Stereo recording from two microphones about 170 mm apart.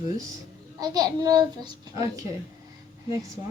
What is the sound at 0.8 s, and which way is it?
A child's voice, 25° right (ahead or behind).